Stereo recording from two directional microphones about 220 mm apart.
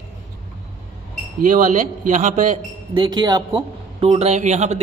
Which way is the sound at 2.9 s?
20° right (ahead or behind).